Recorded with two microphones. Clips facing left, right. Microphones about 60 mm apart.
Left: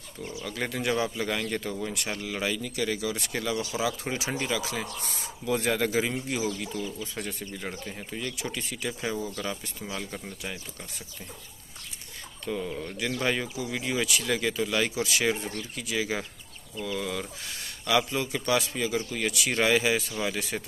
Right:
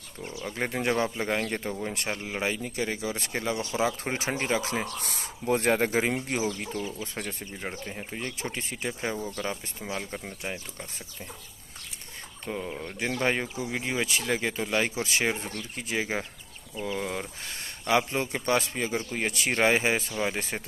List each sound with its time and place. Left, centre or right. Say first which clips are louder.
0.4 s speech: right 2 dB; right
6.8 s speech: even; right
7.7 s speech: right 1 dB; centre
8.2 s speech: left 1 dB; right
12.4 s speech: left 2 dB; right